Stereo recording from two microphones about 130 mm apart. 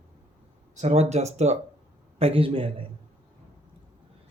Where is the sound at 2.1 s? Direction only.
45° right (ahead or behind).